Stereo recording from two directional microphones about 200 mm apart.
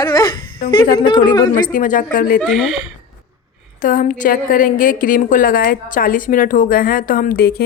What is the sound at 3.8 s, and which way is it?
A woman's voice, 40° left (ahead or behind).